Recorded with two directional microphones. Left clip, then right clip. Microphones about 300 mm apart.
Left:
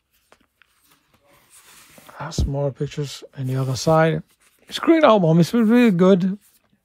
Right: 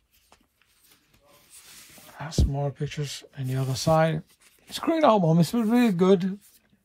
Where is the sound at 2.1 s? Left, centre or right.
Centre.